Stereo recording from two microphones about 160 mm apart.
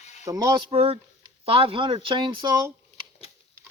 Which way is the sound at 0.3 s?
25° right (ahead or behind).